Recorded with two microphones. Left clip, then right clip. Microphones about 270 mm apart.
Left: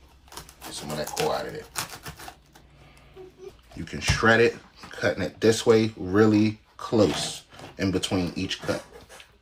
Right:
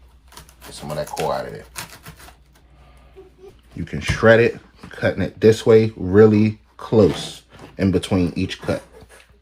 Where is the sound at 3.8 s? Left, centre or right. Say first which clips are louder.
Right 6 dB; centre.